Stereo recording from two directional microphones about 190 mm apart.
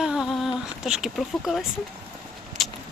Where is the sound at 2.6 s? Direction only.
Centre (ahead or behind).